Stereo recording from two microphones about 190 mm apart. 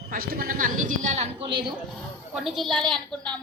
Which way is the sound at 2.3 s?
Centre (ahead or behind).